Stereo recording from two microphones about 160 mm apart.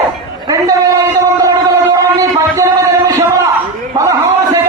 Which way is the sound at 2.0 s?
20° right (ahead or behind).